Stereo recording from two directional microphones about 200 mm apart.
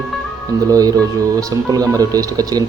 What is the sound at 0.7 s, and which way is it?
Speech, 20° right (ahead or behind).